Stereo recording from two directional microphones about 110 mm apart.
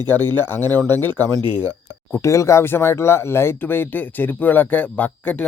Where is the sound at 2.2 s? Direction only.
25° left (ahead or behind).